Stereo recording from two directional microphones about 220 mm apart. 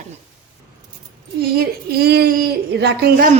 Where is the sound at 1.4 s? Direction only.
45° right (ahead or behind).